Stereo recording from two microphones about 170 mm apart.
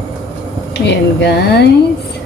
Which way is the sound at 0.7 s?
80° left.